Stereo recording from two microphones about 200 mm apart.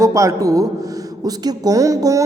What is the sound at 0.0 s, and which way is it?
A man's voice, 15° right (ahead or behind).